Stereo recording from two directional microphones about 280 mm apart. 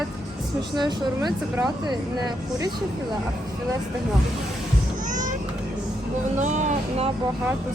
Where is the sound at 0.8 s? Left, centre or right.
Centre.